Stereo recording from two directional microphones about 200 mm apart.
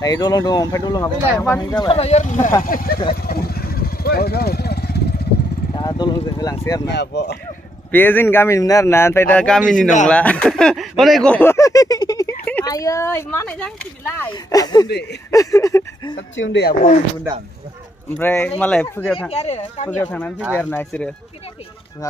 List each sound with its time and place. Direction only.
0.0 s speech: 20° left (ahead or behind); by 2.3 s 35° left (ahead or behind)
2.6 s speech: 45° left (ahead or behind)
3.3 s vehicle: 50° left (ahead or behind)
5.8 s speech: 20° left (ahead or behind)
6.9 s speech: 55° left (ahead or behind)
7.9 s speech: 10° left (ahead or behind)
14.3 s speech: 20° left (ahead or behind)
16.2 s speech: 65° left (ahead or behind)
18.1 s speech: 10° left (ahead or behind)
19.3 s speech: 30° left (ahead or behind)
19.9 s speech: 5° left (ahead or behind)